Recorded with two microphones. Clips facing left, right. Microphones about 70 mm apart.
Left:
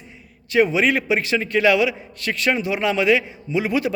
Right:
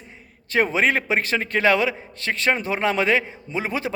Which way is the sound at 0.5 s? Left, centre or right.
Right.